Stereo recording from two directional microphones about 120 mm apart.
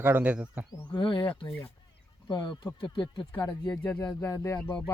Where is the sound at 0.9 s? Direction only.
35° left (ahead or behind).